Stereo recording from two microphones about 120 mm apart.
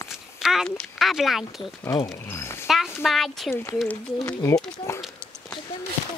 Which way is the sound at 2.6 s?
Centre (ahead or behind).